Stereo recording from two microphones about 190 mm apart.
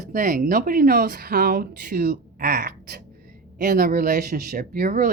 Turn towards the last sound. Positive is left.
turn(degrees=-45)  # may be behind; listen again after turning